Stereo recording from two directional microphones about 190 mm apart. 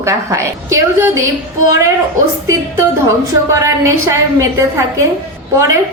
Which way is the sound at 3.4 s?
15° right (ahead or behind).